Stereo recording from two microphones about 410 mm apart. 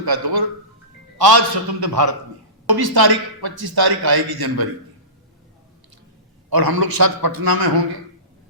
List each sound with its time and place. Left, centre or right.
0.0 s a man's voice: right
6.5 s a man's voice: right